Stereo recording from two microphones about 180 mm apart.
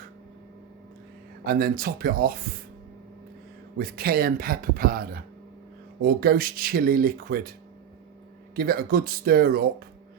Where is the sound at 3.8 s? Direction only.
60° right (ahead or behind).